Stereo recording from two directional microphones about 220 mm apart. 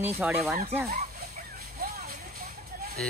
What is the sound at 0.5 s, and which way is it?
Speech, 35° right (ahead or behind).